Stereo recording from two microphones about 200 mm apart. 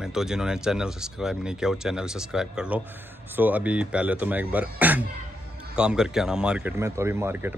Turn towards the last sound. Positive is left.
turn(degrees=-10)  # may be behind; listen again after turning